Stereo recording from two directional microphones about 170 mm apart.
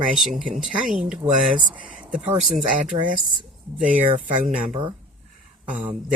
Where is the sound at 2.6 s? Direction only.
50° right (ahead or behind).